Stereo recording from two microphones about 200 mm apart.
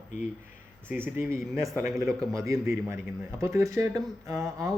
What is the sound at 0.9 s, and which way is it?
A man's voice, 10° right (ahead or behind).